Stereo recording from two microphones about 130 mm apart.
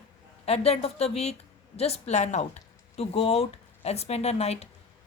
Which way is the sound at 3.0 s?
50° left (ahead or behind).